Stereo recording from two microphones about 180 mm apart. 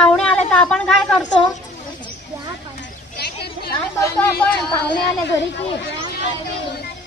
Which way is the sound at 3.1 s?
65° left (ahead or behind).